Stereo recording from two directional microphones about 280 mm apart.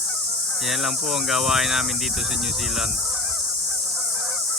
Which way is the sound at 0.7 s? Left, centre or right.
Centre.